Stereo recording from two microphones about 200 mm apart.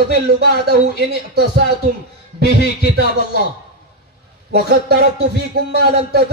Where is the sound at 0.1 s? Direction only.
50° right (ahead or behind).